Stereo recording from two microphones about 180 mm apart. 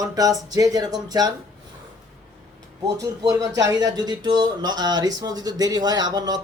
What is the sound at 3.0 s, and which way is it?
Speech, 20° right (ahead or behind).